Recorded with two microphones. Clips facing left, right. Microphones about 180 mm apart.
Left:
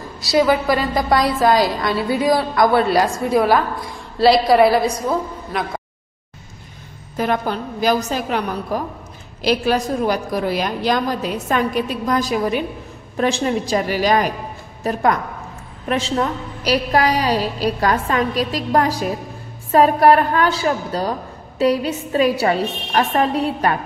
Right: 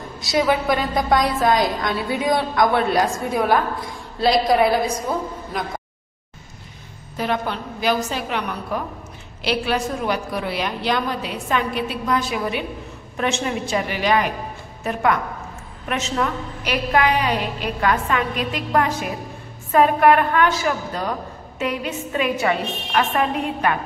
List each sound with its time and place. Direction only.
0.2 s a woman's voice: centre (ahead or behind)
7.2 s a woman's voice: 45° left (ahead or behind)